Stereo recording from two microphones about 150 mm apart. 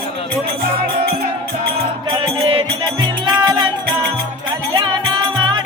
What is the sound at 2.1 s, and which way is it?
Music, 35° right (ahead or behind).